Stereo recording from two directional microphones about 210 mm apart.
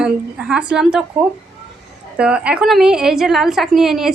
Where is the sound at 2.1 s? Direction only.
5° right (ahead or behind).